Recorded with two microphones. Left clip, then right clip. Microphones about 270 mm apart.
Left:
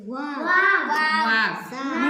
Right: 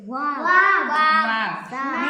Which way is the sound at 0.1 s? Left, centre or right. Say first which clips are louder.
Right 3 dB; centre.